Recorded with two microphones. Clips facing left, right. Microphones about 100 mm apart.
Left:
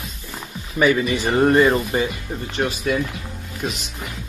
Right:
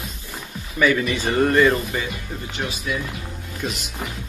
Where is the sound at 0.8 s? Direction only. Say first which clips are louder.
Left 2 dB; 25° left (ahead or behind).